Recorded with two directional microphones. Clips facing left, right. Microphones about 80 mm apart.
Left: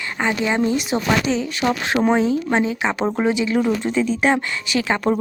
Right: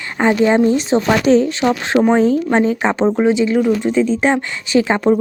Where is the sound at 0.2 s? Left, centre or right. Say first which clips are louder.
Right 8 dB; right.